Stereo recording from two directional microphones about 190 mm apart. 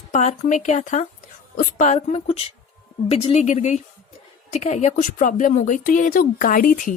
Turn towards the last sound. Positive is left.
turn(degrees=45)  # may be behind; listen again after turning